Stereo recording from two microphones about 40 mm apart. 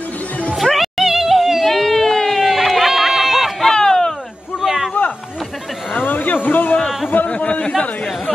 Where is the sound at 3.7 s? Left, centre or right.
Centre.